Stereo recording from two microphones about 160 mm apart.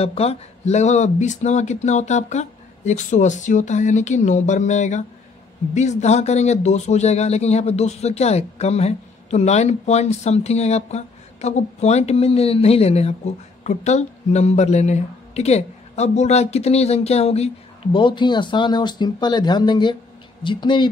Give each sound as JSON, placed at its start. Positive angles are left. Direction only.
{"t": 0.0, "sound": "speech", "side_deg": 40}
{"t": 17.9, "sound": "speech", "side_deg": 30}